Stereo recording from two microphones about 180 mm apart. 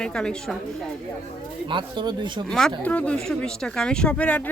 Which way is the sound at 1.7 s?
25° right (ahead or behind).